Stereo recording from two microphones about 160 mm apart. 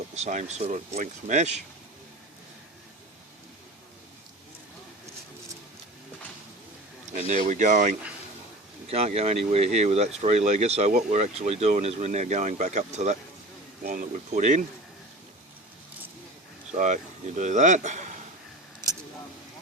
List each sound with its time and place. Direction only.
0.2 s speech: 45° right (ahead or behind)
7.0 s speech: 45° right (ahead or behind)
8.9 s speech: 40° right (ahead or behind)
16.7 s speech: 50° right (ahead or behind)